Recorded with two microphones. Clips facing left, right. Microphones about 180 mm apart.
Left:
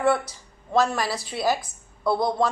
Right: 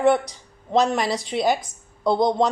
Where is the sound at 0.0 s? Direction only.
20° right (ahead or behind).